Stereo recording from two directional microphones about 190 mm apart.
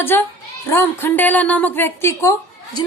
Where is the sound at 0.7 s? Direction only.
10° left (ahead or behind).